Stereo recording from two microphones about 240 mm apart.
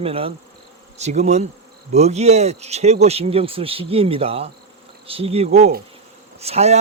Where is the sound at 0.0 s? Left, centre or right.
Right.